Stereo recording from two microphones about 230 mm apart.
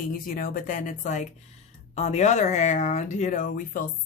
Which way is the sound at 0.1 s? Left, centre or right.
Left.